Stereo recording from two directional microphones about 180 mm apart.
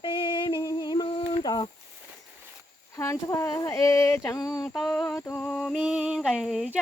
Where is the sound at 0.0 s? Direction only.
25° left (ahead or behind).